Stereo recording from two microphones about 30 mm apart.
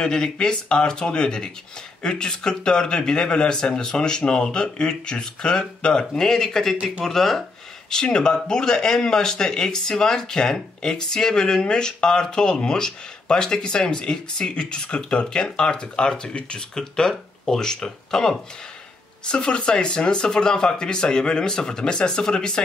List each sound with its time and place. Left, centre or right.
0.0 s speech: left
6.1 s speech: centre
7.9 s speech: left
19.2 s speech: left